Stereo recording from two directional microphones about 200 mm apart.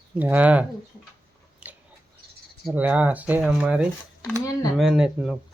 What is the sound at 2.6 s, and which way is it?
Speech, 5° right (ahead or behind).